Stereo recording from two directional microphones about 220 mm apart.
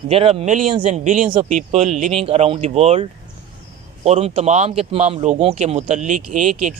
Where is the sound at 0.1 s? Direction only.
25° right (ahead or behind).